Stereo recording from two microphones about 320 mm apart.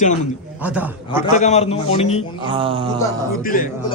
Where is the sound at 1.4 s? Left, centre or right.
Left.